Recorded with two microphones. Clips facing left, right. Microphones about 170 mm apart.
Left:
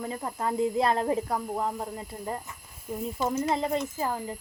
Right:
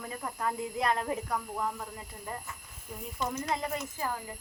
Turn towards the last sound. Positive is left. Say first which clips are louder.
# left 5 dB
turn(degrees=25)  # may be behind; listen again after turning